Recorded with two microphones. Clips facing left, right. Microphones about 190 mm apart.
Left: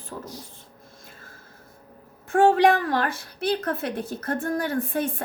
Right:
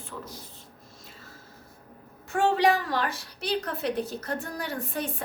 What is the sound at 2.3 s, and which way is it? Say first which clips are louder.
A woman's voice: left 5 dB; 50° left (ahead or behind).